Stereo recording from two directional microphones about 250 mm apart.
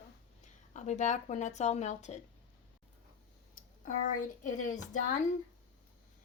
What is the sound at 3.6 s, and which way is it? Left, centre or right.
Speech, left.